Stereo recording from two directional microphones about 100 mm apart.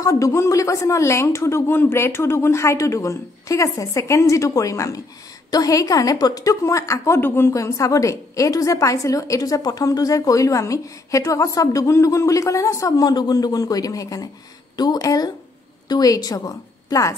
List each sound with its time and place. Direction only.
0.0 s a woman's voice: 30° left (ahead or behind)